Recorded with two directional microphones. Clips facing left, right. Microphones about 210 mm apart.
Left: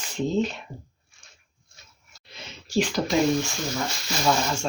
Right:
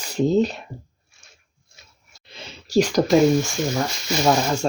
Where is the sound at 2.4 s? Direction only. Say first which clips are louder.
Right 6 dB; 40° right (ahead or behind).